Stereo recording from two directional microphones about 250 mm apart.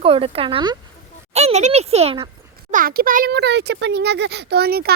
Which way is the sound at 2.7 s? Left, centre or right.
Right.